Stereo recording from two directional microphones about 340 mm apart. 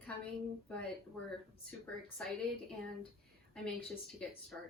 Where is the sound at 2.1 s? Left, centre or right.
Centre.